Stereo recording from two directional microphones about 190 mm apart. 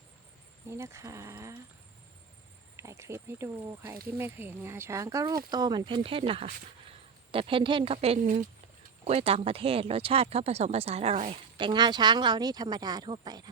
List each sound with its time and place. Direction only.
0.7 s speech: 15° right (ahead or behind)
2.7 s a woman's voice: 15° right (ahead or behind); by 8.4 s 45° right (ahead or behind)
9.0 s speech: 30° right (ahead or behind)